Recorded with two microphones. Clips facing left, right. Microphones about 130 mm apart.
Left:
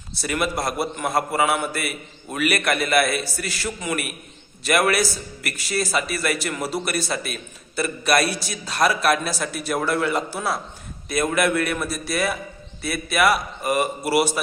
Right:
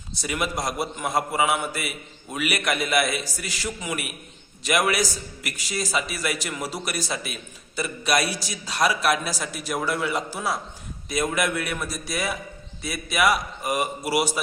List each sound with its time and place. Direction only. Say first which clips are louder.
0.1 s a man's voice: left 3 dB; 15° right (ahead or behind)
12.8 s a man's voice: left 4 dB; 65° left (ahead or behind)
13.1 s a man's voice: left 2 dB; 15° right (ahead or behind)